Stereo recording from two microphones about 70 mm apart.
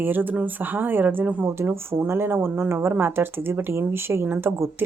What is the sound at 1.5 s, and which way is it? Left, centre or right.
Speech, right.